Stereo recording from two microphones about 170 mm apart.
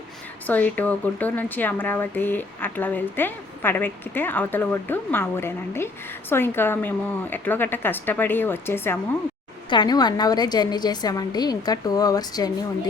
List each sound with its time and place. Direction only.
0.4 s speech: 10° left (ahead or behind)
9.6 s a woman's voice: 25° left (ahead or behind)